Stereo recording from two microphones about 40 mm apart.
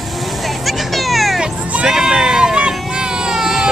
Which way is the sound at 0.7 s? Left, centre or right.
Centre.